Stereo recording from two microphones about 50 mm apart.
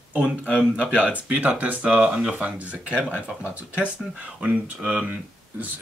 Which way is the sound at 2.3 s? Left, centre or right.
Right.